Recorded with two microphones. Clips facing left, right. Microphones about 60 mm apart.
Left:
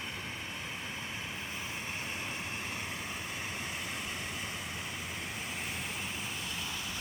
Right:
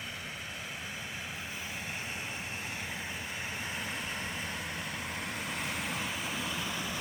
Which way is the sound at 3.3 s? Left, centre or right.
Right.